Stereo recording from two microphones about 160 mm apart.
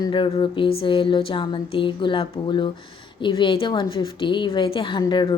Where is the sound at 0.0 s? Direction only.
30° left (ahead or behind).